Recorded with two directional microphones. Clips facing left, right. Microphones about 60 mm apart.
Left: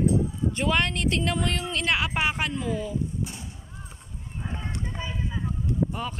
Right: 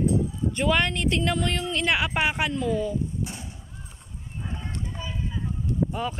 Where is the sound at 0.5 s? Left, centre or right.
Centre.